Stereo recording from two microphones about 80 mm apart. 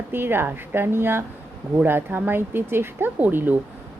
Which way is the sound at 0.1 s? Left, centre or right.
Right.